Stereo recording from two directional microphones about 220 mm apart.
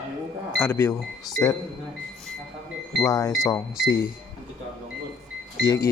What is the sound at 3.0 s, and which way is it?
Speech, 15° left (ahead or behind).